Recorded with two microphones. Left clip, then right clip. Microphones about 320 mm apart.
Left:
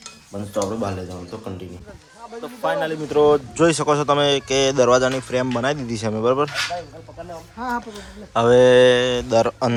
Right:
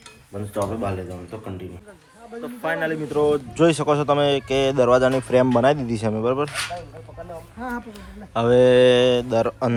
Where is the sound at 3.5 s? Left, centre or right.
Centre.